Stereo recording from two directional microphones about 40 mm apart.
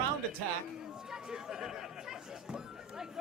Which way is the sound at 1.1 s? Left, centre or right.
Centre.